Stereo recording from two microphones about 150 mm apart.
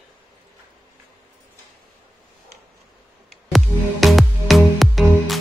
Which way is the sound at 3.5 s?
Centre (ahead or behind).